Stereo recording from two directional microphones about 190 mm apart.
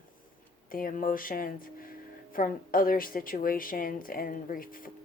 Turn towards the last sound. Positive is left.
turn(degrees=50)  # may be behind; listen again after turning